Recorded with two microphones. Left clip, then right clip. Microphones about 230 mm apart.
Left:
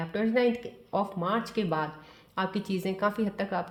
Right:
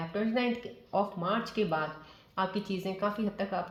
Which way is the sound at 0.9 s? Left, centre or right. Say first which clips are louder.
Left 1 dB; left.